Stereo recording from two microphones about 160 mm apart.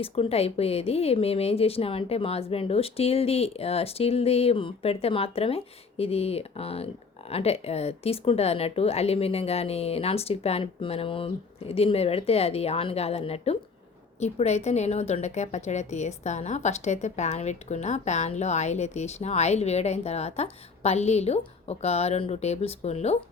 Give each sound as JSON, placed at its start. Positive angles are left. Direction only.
{"t": 0.0, "sound": "a woman's voice", "side_deg": 35}